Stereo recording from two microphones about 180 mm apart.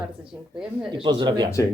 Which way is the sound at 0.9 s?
25° right (ahead or behind).